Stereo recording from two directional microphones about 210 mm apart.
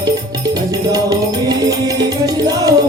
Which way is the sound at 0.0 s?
20° right (ahead or behind).